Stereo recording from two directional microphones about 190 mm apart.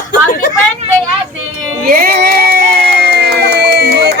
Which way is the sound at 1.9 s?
50° right (ahead or behind).